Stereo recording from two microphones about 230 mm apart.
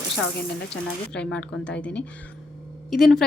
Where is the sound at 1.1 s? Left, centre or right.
Centre.